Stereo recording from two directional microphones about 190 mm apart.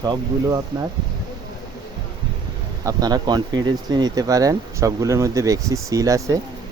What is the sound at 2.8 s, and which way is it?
Speech, 20° right (ahead or behind).